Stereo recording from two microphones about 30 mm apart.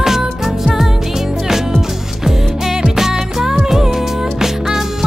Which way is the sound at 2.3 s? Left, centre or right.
Centre.